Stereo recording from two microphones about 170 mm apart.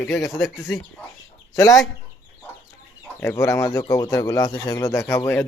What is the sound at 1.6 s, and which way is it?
Speech, 20° left (ahead or behind).